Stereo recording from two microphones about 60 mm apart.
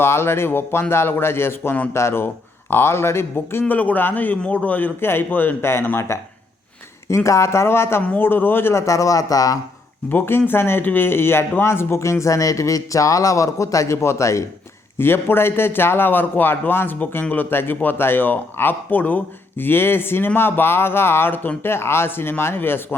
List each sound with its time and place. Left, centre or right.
0.0 s a man's voice: left
4.9 s a man's voice: left
6.1 s speech: left
7.3 s a man's voice: left
8.9 s speech: left
10.1 s speech: left
14.9 s a man's voice: left